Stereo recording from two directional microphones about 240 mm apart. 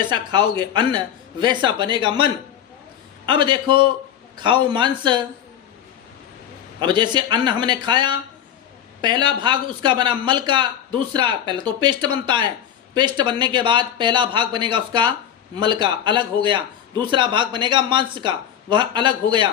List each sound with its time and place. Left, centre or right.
0.1 s speech: centre
3.2 s speech: centre
6.7 s speech: centre